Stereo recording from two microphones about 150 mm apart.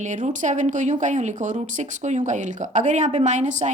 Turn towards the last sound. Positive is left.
turn(degrees=-55)  # may be behind; listen again after turning